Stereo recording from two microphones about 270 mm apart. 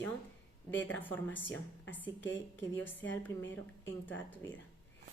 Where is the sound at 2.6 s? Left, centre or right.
Centre.